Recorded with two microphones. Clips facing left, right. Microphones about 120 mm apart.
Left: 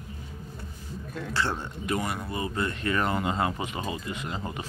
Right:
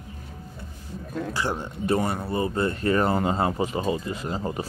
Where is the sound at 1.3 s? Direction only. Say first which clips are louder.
Left 1 dB; 15° right (ahead or behind).